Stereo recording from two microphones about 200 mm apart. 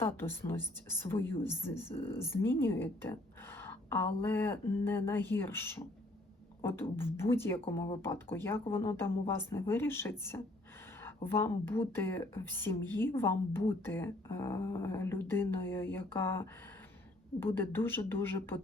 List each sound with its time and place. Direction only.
0.0 s a woman's voice: 10° left (ahead or behind)